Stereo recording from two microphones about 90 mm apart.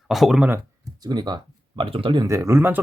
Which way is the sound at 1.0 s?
50° right (ahead or behind).